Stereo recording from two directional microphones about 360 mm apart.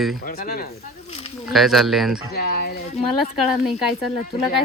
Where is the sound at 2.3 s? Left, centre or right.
Left.